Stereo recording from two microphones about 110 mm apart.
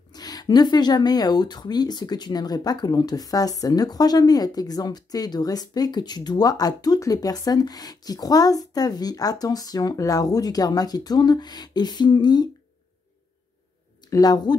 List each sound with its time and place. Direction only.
0.1 s speech: 35° left (ahead or behind)
14.0 s speech: 35° left (ahead or behind)